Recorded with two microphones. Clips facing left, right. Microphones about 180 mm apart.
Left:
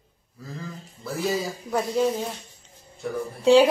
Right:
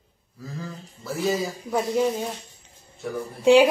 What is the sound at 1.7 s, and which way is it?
Speech, 15° right (ahead or behind).